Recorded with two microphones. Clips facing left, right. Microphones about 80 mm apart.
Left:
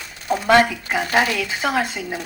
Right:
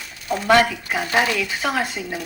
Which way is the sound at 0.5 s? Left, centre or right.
Left.